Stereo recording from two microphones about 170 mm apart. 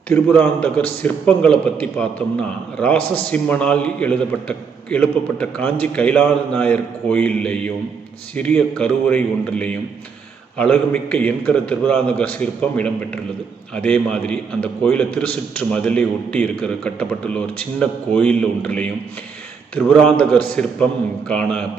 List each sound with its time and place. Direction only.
0.4 s a man's voice: 10° left (ahead or behind)